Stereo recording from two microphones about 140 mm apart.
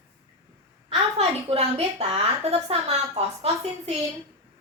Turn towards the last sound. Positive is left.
turn(degrees=-45)  # may be behind; listen again after turning